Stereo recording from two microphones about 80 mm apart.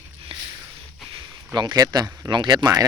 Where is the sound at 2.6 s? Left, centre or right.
Right.